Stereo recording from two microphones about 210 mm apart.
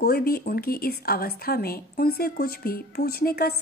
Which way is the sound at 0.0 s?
45° left (ahead or behind).